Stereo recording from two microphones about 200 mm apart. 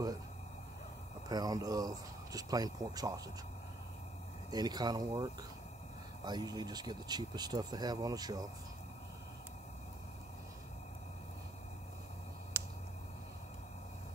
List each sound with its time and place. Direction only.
1.3 s speech: 20° right (ahead or behind)
4.5 s speech: 20° right (ahead or behind)
12.6 s a sound: 10° right (ahead or behind)